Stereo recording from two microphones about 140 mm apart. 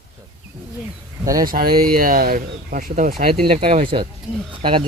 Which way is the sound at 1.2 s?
25° right (ahead or behind).